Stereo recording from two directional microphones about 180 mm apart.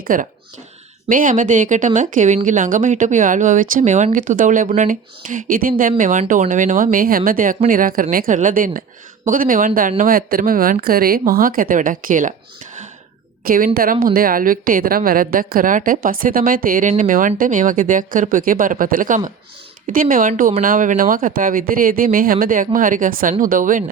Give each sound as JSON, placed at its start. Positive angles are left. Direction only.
{"t": 0.0, "sound": "speech", "side_deg": -50}
{"t": 13.4, "sound": "a woman's voice", "side_deg": -55}